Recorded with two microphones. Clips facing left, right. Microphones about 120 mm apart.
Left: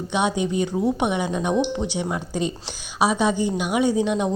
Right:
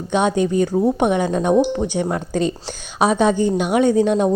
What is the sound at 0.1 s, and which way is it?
A woman's voice, 50° right (ahead or behind).